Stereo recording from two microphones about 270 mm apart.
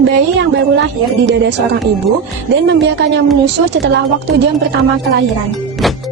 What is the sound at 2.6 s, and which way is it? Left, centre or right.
Speech, right.